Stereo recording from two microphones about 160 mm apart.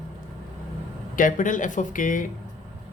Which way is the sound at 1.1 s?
55° left (ahead or behind).